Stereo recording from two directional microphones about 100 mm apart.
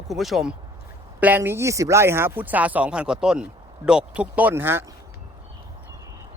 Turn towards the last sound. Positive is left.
turn(degrees=-25)  # may be behind; listen again after turning